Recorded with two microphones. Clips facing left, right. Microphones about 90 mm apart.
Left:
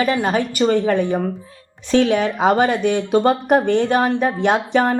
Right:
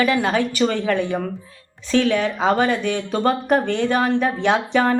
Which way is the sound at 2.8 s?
45° left (ahead or behind).